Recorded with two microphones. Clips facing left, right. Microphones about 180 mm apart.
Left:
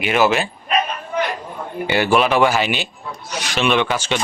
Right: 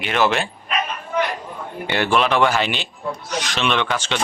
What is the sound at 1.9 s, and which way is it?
A man's voice, 5° left (ahead or behind).